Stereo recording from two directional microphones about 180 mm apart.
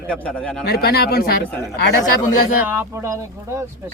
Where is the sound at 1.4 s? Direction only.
10° left (ahead or behind).